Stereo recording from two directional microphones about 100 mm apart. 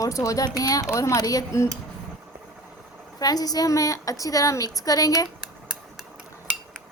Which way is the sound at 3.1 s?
40° left (ahead or behind).